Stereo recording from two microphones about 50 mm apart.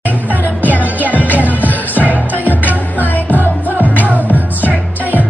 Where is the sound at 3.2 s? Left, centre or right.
Left.